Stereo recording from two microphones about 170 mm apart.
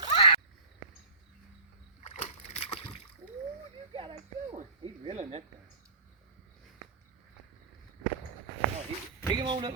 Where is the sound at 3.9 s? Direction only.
30° right (ahead or behind).